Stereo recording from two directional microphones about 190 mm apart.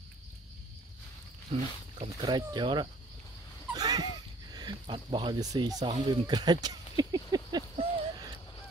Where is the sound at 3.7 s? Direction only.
20° right (ahead or behind).